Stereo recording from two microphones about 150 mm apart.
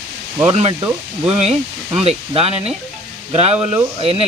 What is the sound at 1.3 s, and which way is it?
Speech, 40° right (ahead or behind).